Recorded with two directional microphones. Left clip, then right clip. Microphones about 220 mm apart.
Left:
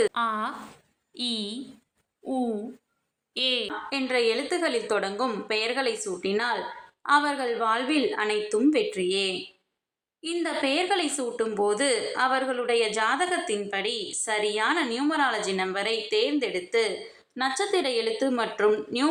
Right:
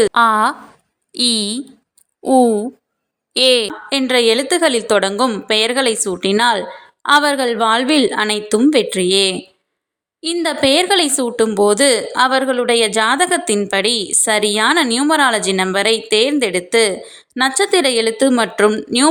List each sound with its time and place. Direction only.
0.0 s a woman's voice: 45° right (ahead or behind)